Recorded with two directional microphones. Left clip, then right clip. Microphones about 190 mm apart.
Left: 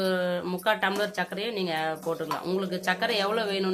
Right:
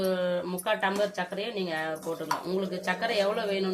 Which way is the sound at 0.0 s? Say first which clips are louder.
Left 1 dB; 35° left (ahead or behind).